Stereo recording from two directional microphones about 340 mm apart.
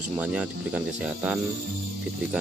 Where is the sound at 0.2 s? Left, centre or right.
Centre.